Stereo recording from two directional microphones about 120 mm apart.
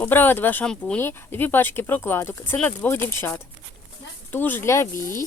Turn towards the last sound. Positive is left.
turn(degrees=25)  # may be behind; listen again after turning